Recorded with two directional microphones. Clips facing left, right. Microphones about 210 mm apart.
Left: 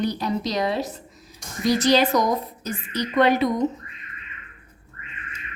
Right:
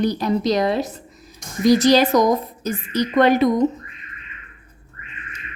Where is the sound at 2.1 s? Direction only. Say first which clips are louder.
Right 5 dB; 45° right (ahead or behind).